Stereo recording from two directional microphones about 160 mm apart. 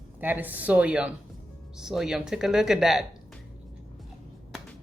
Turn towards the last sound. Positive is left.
turn(degrees=0)  # may be behind; listen again after turning